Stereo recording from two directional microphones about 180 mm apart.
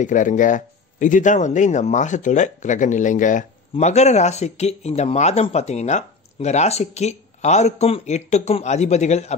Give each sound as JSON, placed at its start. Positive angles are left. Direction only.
{"t": 0.0, "sound": "speech", "side_deg": 45}